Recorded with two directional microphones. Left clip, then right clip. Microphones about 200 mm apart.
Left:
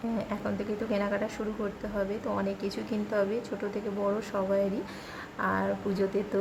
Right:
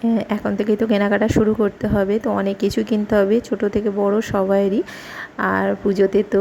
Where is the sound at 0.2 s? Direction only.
35° right (ahead or behind).